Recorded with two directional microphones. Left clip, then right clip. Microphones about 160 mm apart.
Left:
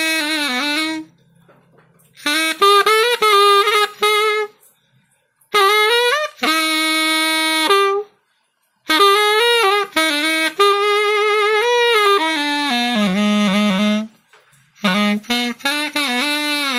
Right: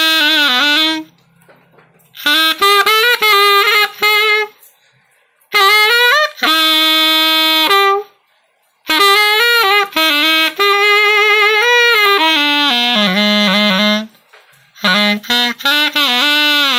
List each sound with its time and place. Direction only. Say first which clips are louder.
0.2 s music: right 8 dB; 20° right (ahead or behind)
2.1 s saxophone: right 6 dB; 20° right (ahead or behind)
5.5 s saxophone: right 4 dB; 15° right (ahead or behind)
14.8 s a sound: right 6 dB; 15° right (ahead or behind)